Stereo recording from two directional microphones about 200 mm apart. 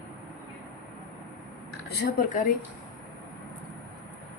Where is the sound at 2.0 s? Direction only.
45° left (ahead or behind).